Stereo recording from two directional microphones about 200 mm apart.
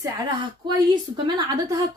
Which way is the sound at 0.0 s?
20° right (ahead or behind).